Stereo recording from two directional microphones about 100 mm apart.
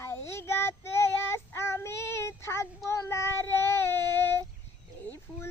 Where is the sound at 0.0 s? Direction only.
25° left (ahead or behind).